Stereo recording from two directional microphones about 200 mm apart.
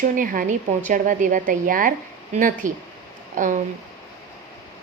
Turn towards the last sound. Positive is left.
turn(degrees=-40)  # may be behind; listen again after turning